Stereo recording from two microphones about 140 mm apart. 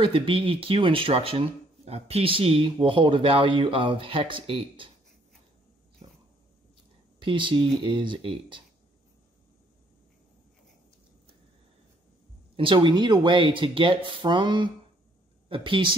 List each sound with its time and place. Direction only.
0.0 s speech: 40° right (ahead or behind)
7.2 s speech: 35° right (ahead or behind)
12.5 s speech: 35° right (ahead or behind)